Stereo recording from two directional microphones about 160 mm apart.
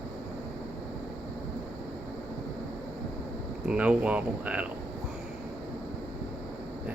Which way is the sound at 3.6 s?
10° right (ahead or behind).